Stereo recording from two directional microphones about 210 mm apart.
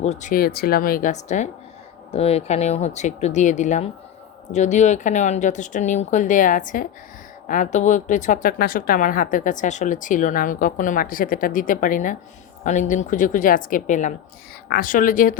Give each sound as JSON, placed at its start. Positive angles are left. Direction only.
{"t": 0.0, "sound": "a woman's voice", "side_deg": 35}